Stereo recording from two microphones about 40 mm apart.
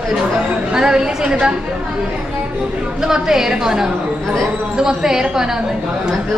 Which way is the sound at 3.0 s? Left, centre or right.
Centre.